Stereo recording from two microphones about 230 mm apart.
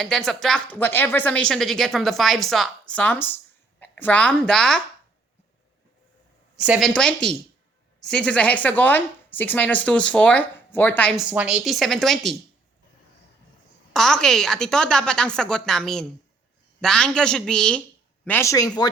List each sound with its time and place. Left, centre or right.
0.0 s speech: centre
6.6 s speech: centre
11.3 s speech: centre
13.9 s speech: centre